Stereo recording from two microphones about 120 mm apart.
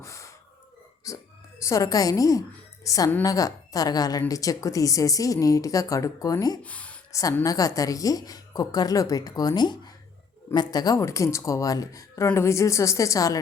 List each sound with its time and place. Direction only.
0.0 s gasp: 25° left (ahead or behind)
1.1 s a woman's voice: 30° left (ahead or behind)
6.6 s speech: 10° left (ahead or behind)
7.1 s a woman's voice: 30° left (ahead or behind)